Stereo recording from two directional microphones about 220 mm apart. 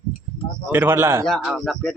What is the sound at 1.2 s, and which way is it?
Speech, centre (ahead or behind).